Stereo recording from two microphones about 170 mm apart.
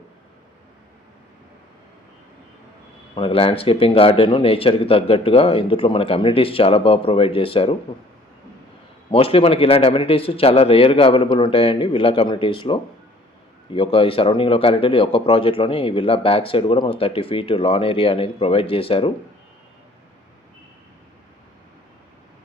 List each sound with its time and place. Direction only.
3.2 s speech: 30° left (ahead or behind)
9.1 s speech: 35° left (ahead or behind)